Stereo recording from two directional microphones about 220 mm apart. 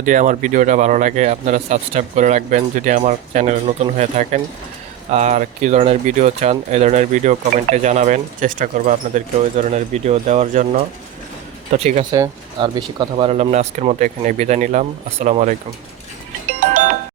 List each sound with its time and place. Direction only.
0.0 s speech: 35° right (ahead or behind)
12.1 s speech: 20° right (ahead or behind)
16.6 s music: 35° right (ahead or behind)